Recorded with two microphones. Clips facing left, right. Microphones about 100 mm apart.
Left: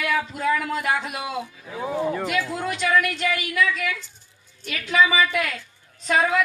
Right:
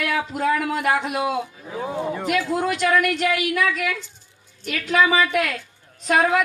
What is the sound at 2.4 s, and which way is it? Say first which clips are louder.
Speech: right 5 dB; 35° right (ahead or behind).